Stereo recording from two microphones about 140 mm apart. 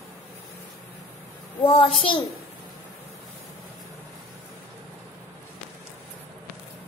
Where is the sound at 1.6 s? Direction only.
40° left (ahead or behind).